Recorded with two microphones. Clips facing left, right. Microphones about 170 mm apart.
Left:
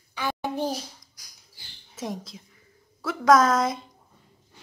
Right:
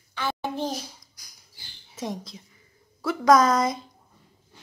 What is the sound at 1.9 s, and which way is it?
A woman's voice, 5° left (ahead or behind).